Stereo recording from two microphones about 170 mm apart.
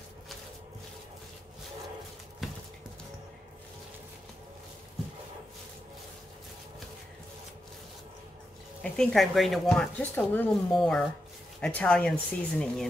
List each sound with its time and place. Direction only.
8.9 s speech: centre (ahead or behind)